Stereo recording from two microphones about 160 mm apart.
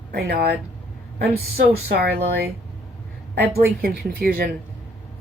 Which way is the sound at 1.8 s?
75° right (ahead or behind).